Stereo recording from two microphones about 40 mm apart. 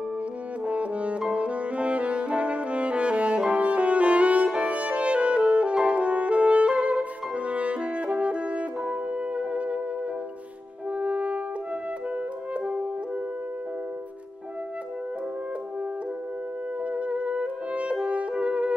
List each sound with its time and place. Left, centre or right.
0.7 s music: right
1.3 s brass instrument: right
3.6 s music: right
10.9 s music: right
12.5 s music: right
16.8 s brass instrument: right